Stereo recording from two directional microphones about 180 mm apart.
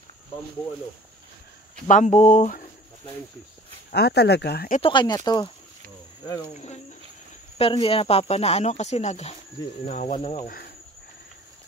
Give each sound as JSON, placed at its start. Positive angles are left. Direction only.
{"t": 1.9, "sound": "speech", "side_deg": 45}
{"t": 3.9, "sound": "speech", "side_deg": 65}
{"t": 4.8, "sound": "speech", "side_deg": 25}
{"t": 7.5, "sound": "speech", "side_deg": 30}
{"t": 10.4, "sound": "speech", "side_deg": 55}